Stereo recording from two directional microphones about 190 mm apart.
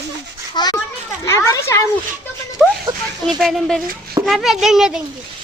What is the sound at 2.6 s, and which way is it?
A woman's voice, centre (ahead or behind).